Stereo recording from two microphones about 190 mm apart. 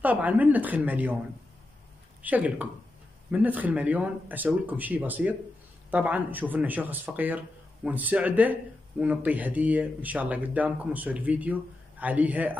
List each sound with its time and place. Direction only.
0.0 s speech: 10° right (ahead or behind)
2.2 s speech: 10° right (ahead or behind)